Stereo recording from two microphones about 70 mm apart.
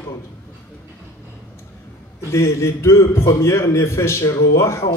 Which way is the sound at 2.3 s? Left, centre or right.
Left.